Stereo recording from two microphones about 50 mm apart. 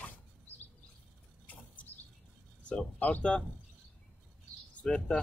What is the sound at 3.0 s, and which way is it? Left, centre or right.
Speech, left.